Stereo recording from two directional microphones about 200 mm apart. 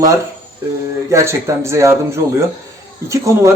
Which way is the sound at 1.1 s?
15° right (ahead or behind).